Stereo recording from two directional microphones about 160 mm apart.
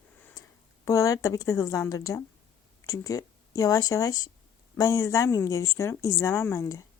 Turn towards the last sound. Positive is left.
turn(degrees=20)  # may be behind; listen again after turning